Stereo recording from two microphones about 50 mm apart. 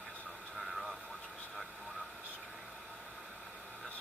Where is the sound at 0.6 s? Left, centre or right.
Centre.